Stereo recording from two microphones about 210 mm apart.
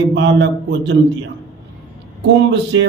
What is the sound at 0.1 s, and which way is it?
Speech, 55° right (ahead or behind).